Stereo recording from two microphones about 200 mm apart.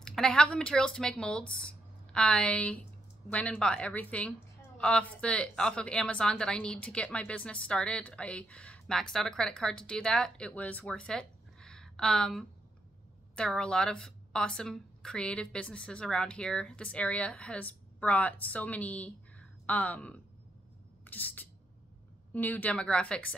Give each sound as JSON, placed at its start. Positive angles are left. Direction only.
{"t": 0.0, "sound": "a woman's voice", "side_deg": 0}
{"t": 21.0, "sound": "a sound", "side_deg": 10}
{"t": 22.3, "sound": "a woman's voice", "side_deg": 10}